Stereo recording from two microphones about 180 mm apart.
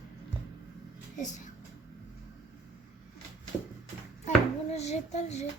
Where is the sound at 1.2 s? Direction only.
45° left (ahead or behind).